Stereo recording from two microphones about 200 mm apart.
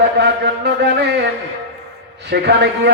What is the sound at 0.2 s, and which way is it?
Speech, 55° right (ahead or behind).